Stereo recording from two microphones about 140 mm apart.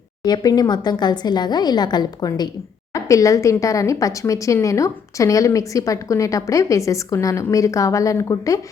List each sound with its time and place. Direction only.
0.2 s speech: 30° left (ahead or behind)